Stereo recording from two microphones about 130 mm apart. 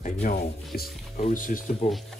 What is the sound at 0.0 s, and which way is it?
Music, 70° left (ahead or behind).